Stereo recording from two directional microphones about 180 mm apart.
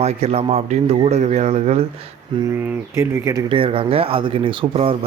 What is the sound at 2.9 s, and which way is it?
Speech, 15° right (ahead or behind).